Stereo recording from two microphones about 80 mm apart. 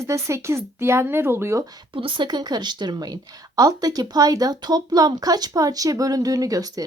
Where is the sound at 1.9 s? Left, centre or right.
Right.